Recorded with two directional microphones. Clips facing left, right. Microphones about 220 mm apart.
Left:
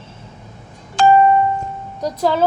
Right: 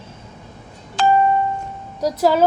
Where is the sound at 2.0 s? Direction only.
10° right (ahead or behind).